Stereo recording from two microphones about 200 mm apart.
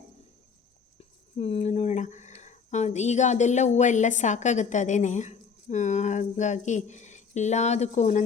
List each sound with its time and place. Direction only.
0.9 s speech: 30° left (ahead or behind)